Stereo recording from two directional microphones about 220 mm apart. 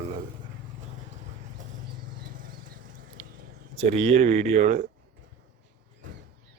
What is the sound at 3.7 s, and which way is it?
Speech, 25° right (ahead or behind).